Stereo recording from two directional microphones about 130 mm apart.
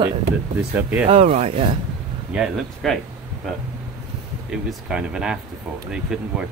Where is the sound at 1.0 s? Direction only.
60° right (ahead or behind).